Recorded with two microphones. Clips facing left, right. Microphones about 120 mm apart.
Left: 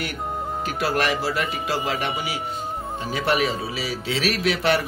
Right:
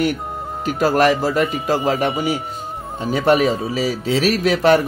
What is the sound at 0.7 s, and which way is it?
Speech, 45° right (ahead or behind).